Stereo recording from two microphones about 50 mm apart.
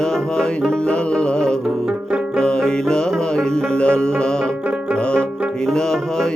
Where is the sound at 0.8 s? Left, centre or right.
Left.